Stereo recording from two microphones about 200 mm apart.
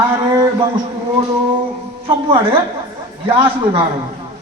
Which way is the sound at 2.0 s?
25° right (ahead or behind).